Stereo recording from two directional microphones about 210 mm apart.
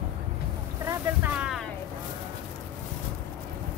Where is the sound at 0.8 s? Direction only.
5° right (ahead or behind).